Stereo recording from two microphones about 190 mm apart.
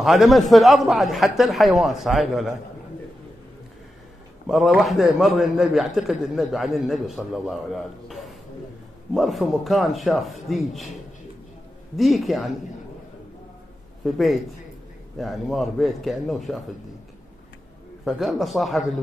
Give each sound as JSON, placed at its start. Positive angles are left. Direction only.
{"t": 0.0, "sound": "a man's voice", "side_deg": 0}
{"t": 4.5, "sound": "a man's voice", "side_deg": 0}
{"t": 12.0, "sound": "a man's voice", "side_deg": 0}
{"t": 14.0, "sound": "a man's voice", "side_deg": 0}
{"t": 18.0, "sound": "a man's voice", "side_deg": 0}